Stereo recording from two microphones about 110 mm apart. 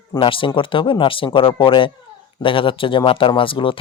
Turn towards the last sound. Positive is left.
turn(degrees=50)  # may be behind; listen again after turning